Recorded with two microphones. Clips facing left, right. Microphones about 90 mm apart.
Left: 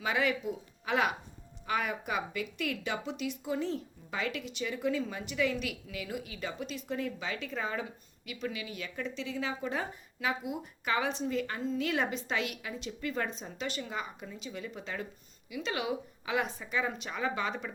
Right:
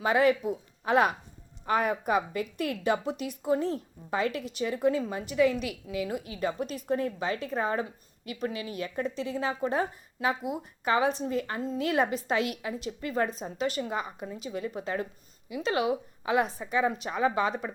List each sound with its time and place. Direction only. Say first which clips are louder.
0.0 s a woman's voice: right 7 dB; 35° right (ahead or behind)